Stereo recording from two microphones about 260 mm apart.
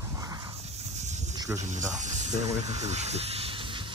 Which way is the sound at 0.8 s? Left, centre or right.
Right.